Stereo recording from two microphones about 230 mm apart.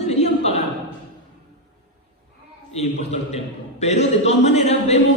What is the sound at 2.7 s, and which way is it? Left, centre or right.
A man's voice, left.